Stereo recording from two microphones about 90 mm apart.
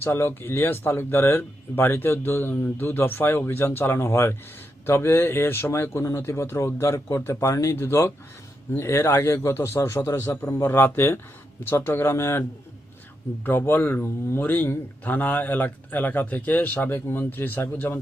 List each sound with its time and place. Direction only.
0.0 s speech: 30° left (ahead or behind)